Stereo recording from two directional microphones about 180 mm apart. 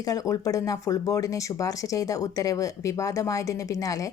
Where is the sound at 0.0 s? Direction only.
20° left (ahead or behind).